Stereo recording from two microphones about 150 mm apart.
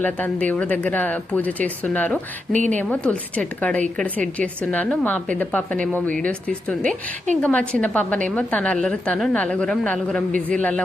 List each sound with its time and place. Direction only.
0.0 s speech: 10° left (ahead or behind)
2.5 s speech: 55° right (ahead or behind)
2.7 s speech: 10° left (ahead or behind)